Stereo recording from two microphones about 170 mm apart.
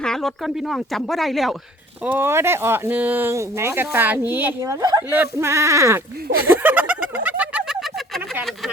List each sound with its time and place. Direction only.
0.0 s speech: centre (ahead or behind)
2.0 s speech: 15° right (ahead or behind)
6.5 s goat: 10° right (ahead or behind)
7.3 s a sound: 10° right (ahead or behind)